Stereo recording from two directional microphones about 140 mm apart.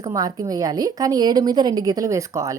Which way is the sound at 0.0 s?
25° right (ahead or behind).